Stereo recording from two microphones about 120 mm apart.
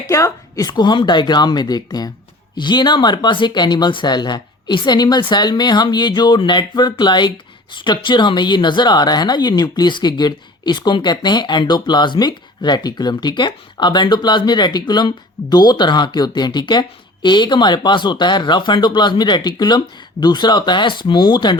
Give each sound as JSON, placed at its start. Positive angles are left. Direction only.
{"t": 0.1, "sound": "speech", "side_deg": 30}